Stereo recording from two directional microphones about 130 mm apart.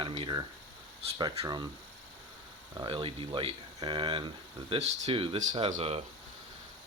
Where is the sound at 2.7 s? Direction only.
35° right (ahead or behind); by 6.0 s 50° right (ahead or behind).